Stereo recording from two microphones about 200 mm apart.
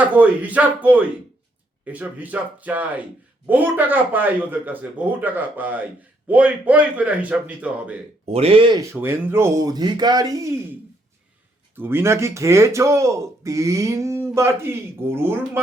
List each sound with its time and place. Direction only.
0.0 s speech: 5° right (ahead or behind)
8.3 s speech: 30° right (ahead or behind)
11.8 s speech: 10° right (ahead or behind)